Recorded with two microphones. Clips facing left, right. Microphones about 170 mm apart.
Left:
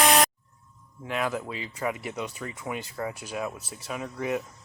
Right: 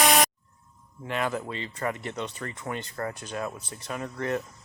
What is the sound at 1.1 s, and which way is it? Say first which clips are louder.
Speech: even; centre (ahead or behind).